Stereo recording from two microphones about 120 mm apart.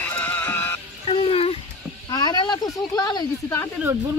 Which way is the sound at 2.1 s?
35° left (ahead or behind).